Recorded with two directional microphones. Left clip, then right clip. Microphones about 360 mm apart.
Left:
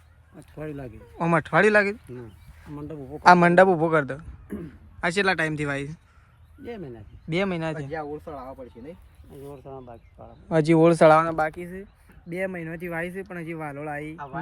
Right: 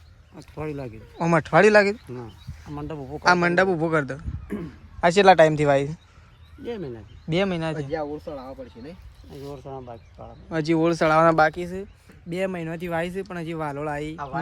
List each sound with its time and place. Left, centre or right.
0.3 s speech: centre
2.9 s a man's voice: right
3.2 s speech: centre
7.9 s speech: left
9.3 s speech: right
10.5 s speech: centre
11.3 s speech: right